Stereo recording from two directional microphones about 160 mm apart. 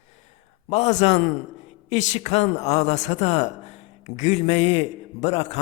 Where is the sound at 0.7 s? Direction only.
45° left (ahead or behind).